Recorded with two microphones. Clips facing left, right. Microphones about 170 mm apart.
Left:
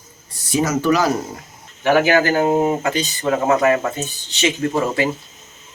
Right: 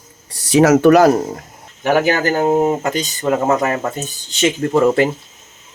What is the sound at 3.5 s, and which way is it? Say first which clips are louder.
Speech: left 1 dB; 40° right (ahead or behind).